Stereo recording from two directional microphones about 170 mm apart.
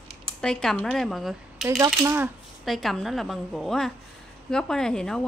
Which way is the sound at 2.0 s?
15° right (ahead or behind).